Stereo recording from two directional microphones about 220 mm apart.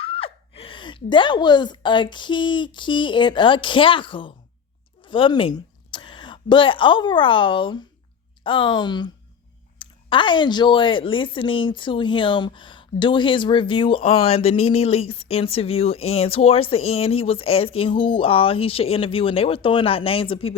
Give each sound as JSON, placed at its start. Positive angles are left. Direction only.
{"t": 0.0, "sound": "a woman's voice", "side_deg": 25}